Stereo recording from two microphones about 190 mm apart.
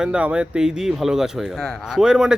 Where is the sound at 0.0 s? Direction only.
5° right (ahead or behind).